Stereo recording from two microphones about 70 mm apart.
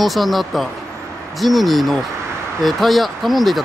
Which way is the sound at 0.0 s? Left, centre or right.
Centre.